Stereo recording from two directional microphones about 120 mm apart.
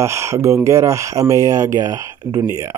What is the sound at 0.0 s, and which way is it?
Speech, 25° right (ahead or behind).